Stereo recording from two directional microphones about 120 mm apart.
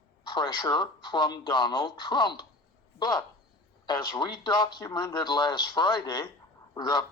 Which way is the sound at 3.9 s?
35° left (ahead or behind).